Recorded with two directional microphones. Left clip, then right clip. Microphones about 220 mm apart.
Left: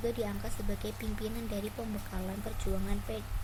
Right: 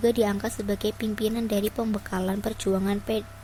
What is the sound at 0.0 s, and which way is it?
Speech, 40° right (ahead or behind).